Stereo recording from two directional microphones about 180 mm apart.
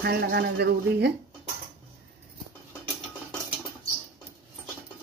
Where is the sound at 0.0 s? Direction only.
65° right (ahead or behind).